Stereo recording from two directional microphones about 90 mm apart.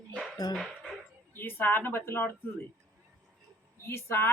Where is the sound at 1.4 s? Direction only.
25° left (ahead or behind).